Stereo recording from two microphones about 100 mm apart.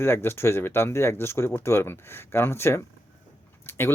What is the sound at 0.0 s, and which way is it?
Speech, 25° left (ahead or behind).